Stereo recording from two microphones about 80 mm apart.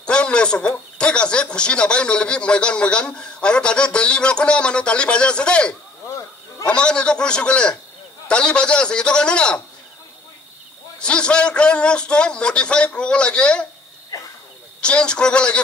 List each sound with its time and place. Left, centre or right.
0.0 s speech: centre
11.0 s speech: centre
14.1 s a sound: left
14.8 s speech: centre